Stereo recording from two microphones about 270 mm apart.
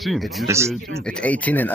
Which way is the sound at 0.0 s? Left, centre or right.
Centre.